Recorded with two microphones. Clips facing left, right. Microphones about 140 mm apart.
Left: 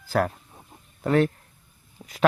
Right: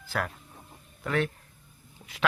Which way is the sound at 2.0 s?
50° left (ahead or behind).